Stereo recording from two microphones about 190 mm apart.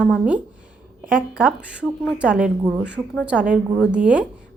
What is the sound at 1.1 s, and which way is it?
A woman's voice, 5° right (ahead or behind).